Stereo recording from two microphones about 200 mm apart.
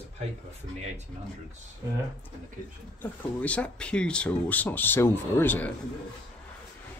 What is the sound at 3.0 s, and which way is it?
Speech, 5° left (ahead or behind).